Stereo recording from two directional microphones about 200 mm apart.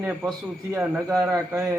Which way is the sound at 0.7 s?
15° right (ahead or behind).